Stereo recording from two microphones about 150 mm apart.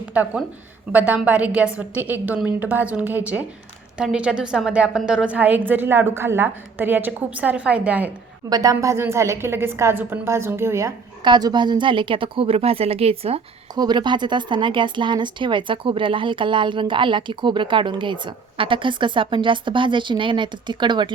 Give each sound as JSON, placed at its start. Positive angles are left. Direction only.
{"t": 0.1, "sound": "a woman's voice", "side_deg": -10}
{"t": 8.4, "sound": "a woman's voice", "side_deg": -25}
{"t": 11.2, "sound": "speech", "side_deg": -30}
{"t": 13.7, "sound": "speech", "side_deg": -30}